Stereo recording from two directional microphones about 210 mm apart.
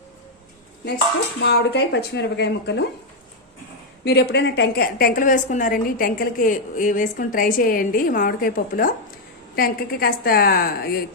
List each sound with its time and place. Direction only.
1.4 s a woman's voice: 50° left (ahead or behind)
4.0 s a woman's voice: 50° left (ahead or behind)